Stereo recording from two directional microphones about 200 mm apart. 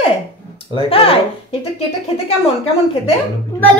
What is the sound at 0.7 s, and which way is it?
Speech, 30° left (ahead or behind).